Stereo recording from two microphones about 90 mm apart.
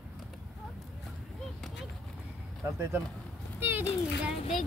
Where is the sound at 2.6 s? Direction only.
25° right (ahead or behind).